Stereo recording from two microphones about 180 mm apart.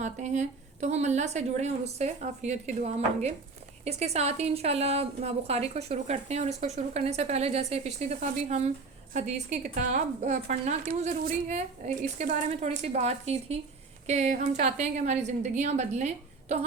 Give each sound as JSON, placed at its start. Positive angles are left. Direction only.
{"t": 0.0, "sound": "a woman's voice", "side_deg": -40}